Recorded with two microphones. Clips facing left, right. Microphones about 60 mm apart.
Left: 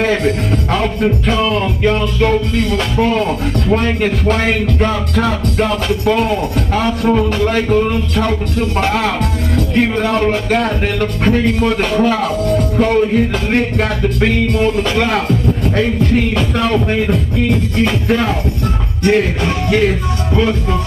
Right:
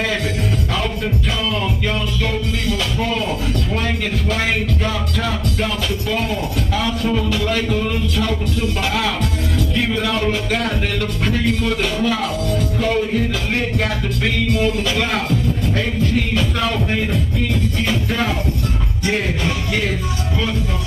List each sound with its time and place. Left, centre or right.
0.0 s a man's voice: left